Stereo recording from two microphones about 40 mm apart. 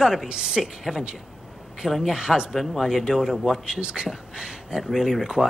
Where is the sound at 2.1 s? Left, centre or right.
Centre.